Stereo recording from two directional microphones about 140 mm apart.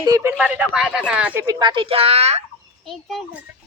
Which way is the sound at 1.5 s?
30° right (ahead or behind).